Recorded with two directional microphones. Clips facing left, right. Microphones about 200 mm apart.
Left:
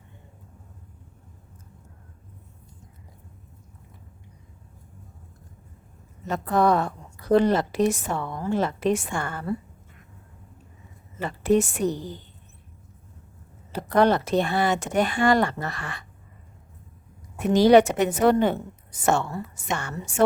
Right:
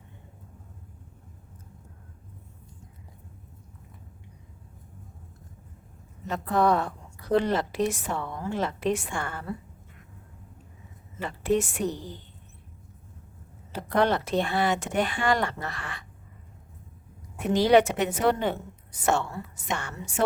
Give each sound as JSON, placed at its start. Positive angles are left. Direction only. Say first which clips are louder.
{"t": 6.2, "sound": "a woman's voice", "louder": "left 2 dB", "side_deg": 45}
{"t": 11.2, "sound": "speech", "louder": "left 4 dB", "side_deg": 40}
{"t": 13.7, "sound": "speech", "louder": "left 4 dB", "side_deg": 40}
{"t": 17.5, "sound": "a woman's voice", "louder": "left 4 dB", "side_deg": 40}